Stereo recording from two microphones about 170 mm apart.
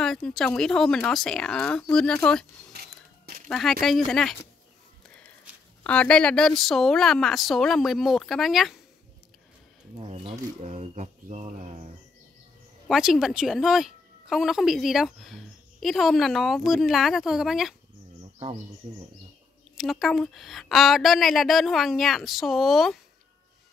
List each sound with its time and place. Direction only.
0.0 s a woman's voice: centre (ahead or behind)
3.4 s a woman's voice: centre (ahead or behind)
5.9 s a woman's voice: 5° left (ahead or behind)
9.9 s speech: 35° right (ahead or behind)
12.8 s a woman's voice: centre (ahead or behind)
19.8 s a woman's voice: centre (ahead or behind)